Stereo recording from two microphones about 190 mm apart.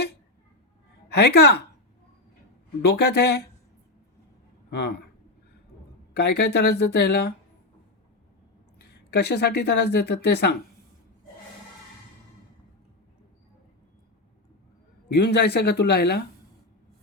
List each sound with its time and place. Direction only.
1.1 s speech: 60° left (ahead or behind)
2.8 s speech: 60° left (ahead or behind)
4.7 s speech: 60° left (ahead or behind)
6.1 s speech: 60° left (ahead or behind)
9.0 s speech: 60° left (ahead or behind)
15.1 s speech: 60° left (ahead or behind)